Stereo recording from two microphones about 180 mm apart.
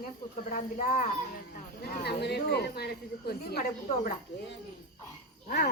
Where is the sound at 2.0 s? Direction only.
65° left (ahead or behind).